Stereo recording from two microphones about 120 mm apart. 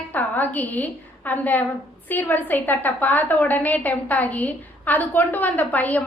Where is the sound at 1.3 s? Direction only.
15° left (ahead or behind).